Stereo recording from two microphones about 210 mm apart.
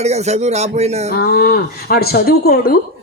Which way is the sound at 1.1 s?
45° left (ahead or behind).